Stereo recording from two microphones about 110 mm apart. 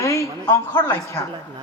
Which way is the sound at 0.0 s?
25° left (ahead or behind).